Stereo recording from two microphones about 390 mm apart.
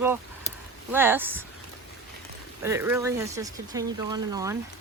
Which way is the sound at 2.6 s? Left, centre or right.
Centre.